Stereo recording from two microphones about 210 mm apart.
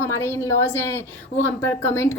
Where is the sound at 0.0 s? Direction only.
10° left (ahead or behind).